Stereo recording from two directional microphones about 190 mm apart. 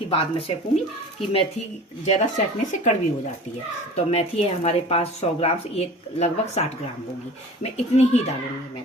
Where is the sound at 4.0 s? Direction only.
35° left (ahead or behind).